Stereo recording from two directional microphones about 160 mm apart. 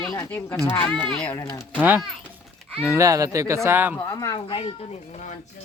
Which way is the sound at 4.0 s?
25° left (ahead or behind).